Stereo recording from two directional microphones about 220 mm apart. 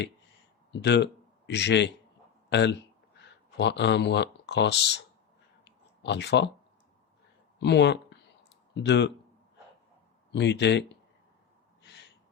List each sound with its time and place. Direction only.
0.7 s a man's voice: 50° left (ahead or behind)
5.6 s clicking: 50° left (ahead or behind)
7.6 s speech: 50° left (ahead or behind)
10.3 s speech: 50° left (ahead or behind)